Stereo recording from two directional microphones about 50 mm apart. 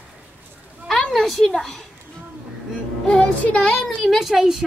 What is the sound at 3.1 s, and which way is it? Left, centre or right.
Speech, left.